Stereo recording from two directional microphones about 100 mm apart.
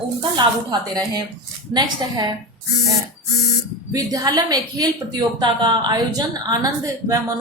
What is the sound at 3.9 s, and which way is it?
A woman's voice, 40° right (ahead or behind).